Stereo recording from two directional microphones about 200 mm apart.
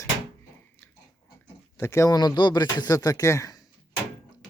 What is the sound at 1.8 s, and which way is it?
Speech, 15° left (ahead or behind).